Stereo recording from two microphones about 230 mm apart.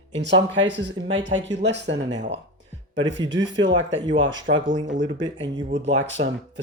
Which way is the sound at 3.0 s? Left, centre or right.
Right.